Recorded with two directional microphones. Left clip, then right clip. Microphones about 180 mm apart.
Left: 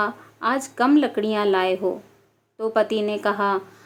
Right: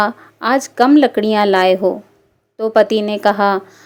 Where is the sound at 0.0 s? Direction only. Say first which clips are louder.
Right 7 dB; 35° right (ahead or behind).